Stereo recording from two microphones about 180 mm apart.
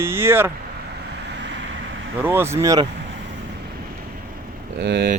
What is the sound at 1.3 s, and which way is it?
Vehicle, 75° right (ahead or behind).